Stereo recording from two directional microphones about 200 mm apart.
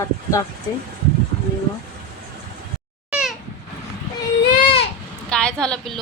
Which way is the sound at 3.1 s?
5° right (ahead or behind).